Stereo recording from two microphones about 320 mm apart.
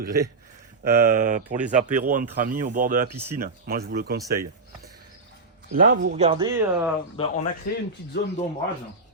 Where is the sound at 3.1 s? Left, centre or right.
Centre.